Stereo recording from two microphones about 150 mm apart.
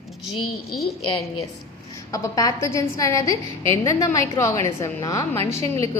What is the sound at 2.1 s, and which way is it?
A woman's voice, 20° left (ahead or behind).